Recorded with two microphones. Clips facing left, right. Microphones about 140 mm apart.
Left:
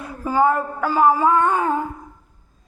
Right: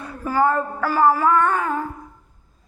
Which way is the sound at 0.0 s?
15° left (ahead or behind).